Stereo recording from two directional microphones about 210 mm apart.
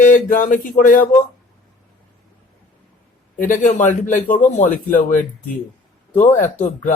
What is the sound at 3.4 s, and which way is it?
Speech, 35° left (ahead or behind).